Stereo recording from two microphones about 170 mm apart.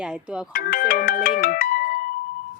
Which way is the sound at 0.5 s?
55° left (ahead or behind).